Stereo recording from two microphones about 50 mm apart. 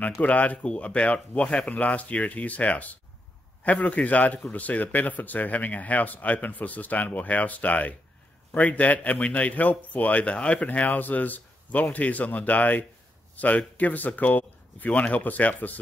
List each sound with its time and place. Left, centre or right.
0.0 s speech: left